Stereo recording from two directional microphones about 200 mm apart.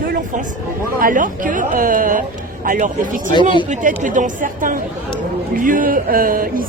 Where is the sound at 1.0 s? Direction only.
40° right (ahead or behind).